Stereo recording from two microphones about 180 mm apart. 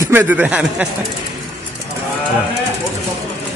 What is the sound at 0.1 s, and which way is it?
Speech, 10° right (ahead or behind).